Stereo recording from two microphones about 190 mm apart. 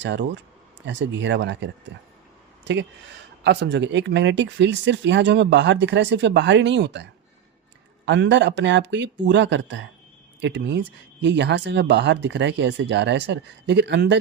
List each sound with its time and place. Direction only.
0.0 s speech: 70° right (ahead or behind)